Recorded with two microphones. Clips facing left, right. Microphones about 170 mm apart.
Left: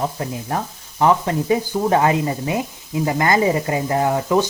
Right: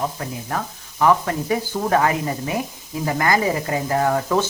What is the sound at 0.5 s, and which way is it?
Speech, 20° left (ahead or behind).